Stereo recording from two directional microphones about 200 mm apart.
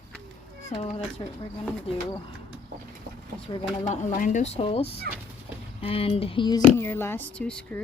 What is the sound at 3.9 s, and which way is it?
Speech, 40° left (ahead or behind).